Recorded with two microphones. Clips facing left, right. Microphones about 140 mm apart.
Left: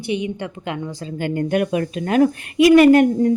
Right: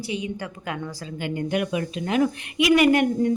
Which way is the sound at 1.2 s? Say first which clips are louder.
Left 5 dB; 50° left (ahead or behind).